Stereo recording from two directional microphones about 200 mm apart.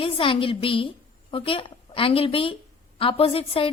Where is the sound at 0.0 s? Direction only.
25° left (ahead or behind).